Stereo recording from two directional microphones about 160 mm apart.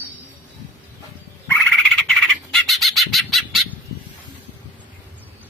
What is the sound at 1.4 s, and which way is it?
Bird, 5° left (ahead or behind).